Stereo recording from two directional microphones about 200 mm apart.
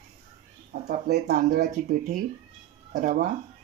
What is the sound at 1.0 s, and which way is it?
Speech, 50° right (ahead or behind).